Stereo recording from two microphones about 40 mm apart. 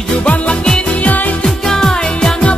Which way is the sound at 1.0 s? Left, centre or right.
Left.